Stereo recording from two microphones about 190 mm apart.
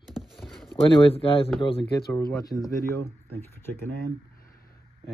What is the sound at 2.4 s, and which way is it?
Speech, 20° left (ahead or behind).